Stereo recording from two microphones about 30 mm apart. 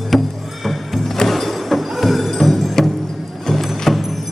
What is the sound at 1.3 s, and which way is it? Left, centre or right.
Music, centre.